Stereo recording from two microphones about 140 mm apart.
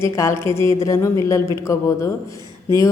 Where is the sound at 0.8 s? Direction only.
20° left (ahead or behind).